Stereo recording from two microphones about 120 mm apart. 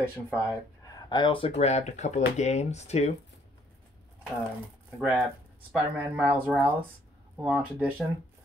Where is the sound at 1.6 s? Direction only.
65° left (ahead or behind).